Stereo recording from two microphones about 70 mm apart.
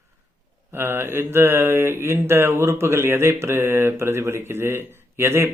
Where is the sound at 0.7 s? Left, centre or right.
Right.